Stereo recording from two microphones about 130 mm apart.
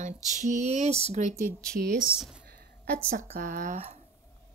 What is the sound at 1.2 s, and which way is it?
Speech, 75° right (ahead or behind).